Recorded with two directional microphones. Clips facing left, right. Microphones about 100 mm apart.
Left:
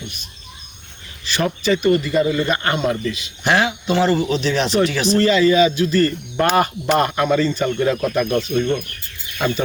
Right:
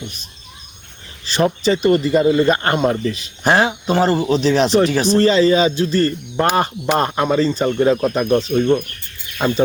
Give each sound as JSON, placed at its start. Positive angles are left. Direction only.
{"t": 1.2, "sound": "speech", "side_deg": -30}
{"t": 6.3, "sound": "speech", "side_deg": -20}
{"t": 6.6, "sound": "speech", "side_deg": -30}